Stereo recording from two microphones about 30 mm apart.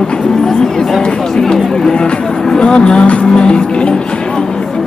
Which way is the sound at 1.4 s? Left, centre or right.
Centre.